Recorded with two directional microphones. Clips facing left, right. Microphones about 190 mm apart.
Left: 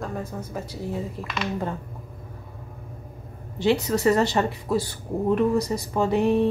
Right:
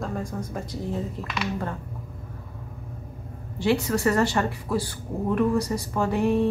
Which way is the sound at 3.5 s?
20° left (ahead or behind).